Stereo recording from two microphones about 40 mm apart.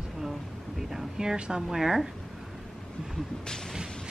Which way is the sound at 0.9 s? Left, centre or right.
Centre.